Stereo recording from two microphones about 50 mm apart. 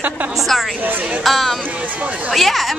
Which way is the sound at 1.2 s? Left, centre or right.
Centre.